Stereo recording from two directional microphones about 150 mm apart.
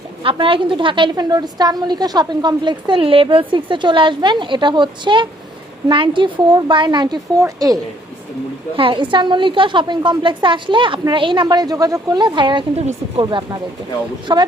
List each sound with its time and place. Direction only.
0.2 s a woman's voice: 35° right (ahead or behind)
8.7 s a woman's voice: 35° right (ahead or behind)
12.8 s speech: 50° right (ahead or behind)
13.2 s speech: 30° right (ahead or behind)